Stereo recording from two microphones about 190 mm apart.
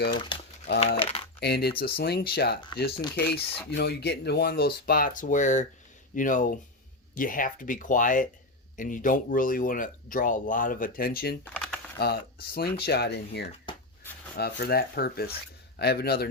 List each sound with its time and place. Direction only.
0.1 s crumpling: 25° left (ahead or behind)
0.9 s speech: 30° left (ahead or behind)
1.4 s speech: 60° left (ahead or behind)
11.4 s typing: 5° left (ahead or behind)
11.9 s speech: 55° left (ahead or behind)